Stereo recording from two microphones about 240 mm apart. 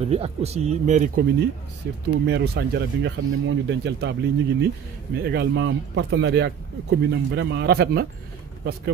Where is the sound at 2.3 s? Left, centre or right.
Right.